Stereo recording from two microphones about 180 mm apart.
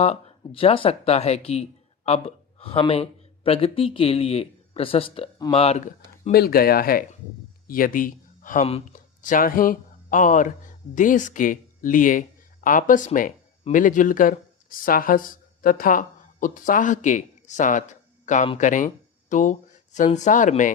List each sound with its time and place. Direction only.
0.0 s speech: 35° left (ahead or behind)
6.3 s speech: 60° left (ahead or behind)